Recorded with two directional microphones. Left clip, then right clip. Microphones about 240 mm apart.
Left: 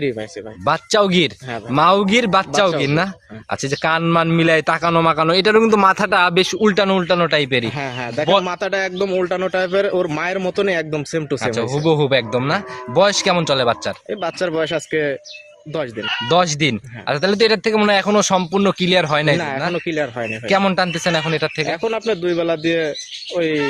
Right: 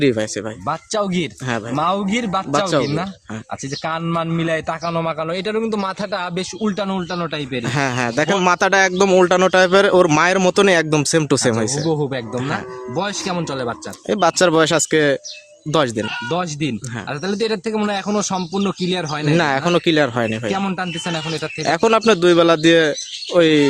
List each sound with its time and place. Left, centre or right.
0.6 s a man's voice: left
7.7 s speech: right
11.9 s a man's voice: left
14.1 s speech: right
16.3 s a man's voice: left
19.4 s speech: right
20.5 s a man's voice: left
21.7 s speech: right